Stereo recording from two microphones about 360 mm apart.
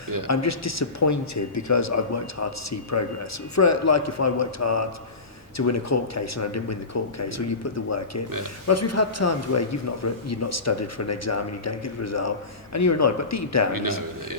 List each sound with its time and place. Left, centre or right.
0.3 s a man's voice: left